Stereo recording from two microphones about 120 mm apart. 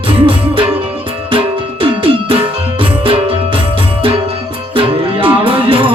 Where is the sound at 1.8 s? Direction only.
45° right (ahead or behind).